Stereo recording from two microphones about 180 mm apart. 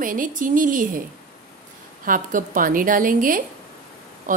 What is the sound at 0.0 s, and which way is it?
A woman's voice, 50° right (ahead or behind).